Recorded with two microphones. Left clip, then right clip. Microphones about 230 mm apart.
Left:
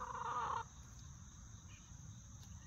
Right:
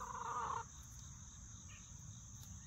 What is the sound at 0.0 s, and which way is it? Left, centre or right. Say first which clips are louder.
Chicken: left 1 dB; centre.